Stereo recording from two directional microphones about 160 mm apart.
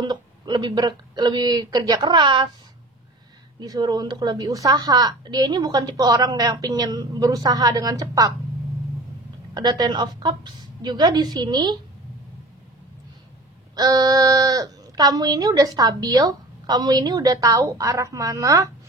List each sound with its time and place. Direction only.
0.0 s speech: 25° right (ahead or behind)
3.5 s speech: 25° right (ahead or behind)
9.5 s speech: 25° right (ahead or behind)
13.7 s speech: 25° right (ahead or behind)